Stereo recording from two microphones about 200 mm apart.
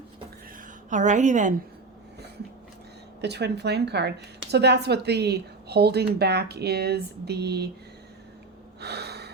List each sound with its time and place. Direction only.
0.9 s a woman's voice: 35° right (ahead or behind)
3.2 s a woman's voice: 55° right (ahead or behind)
8.8 s gasp: 55° right (ahead or behind)